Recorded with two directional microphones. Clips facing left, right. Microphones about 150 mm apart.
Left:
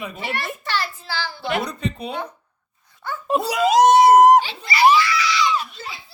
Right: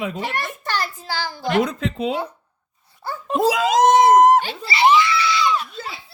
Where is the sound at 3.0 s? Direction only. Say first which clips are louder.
Even; 35° right (ahead or behind).